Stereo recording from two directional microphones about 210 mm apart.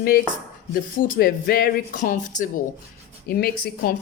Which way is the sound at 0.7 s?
40° left (ahead or behind).